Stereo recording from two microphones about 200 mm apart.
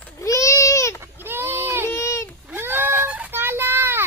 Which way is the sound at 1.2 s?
10° right (ahead or behind).